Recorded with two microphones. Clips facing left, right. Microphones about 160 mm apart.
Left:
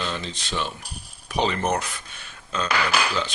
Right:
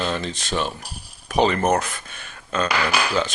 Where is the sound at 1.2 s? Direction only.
50° right (ahead or behind).